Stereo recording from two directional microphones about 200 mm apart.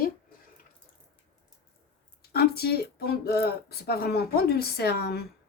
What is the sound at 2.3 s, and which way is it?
Speech, 50° left (ahead or behind).